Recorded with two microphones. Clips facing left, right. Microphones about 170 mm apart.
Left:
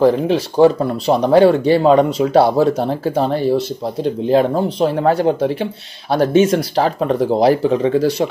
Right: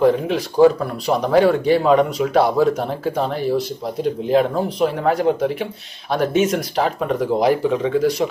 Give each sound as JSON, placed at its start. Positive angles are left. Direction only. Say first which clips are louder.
{"t": 0.0, "sound": "speech", "louder": "left 3 dB", "side_deg": 30}